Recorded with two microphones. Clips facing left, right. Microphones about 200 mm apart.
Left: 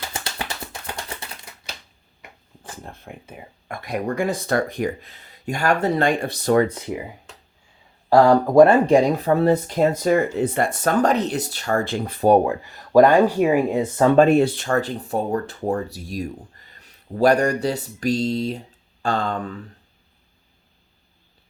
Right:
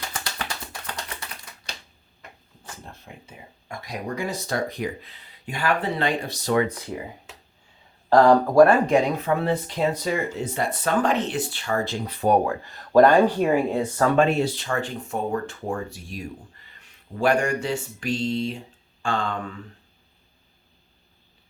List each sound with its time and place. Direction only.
0.1 s music: 25° left (ahead or behind)
2.8 s speech: 55° left (ahead or behind)
6.7 s speech: 20° left (ahead or behind)
8.1 s speech: 10° left (ahead or behind)
8.5 s speech: 25° left (ahead or behind); by 12.2 s 50° left (ahead or behind)
12.5 s speech: 10° left (ahead or behind)
14.2 s speech: 50° left (ahead or behind)